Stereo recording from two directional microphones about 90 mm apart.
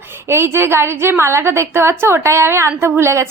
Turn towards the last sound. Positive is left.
turn(degrees=-30)  # may be behind; listen again after turning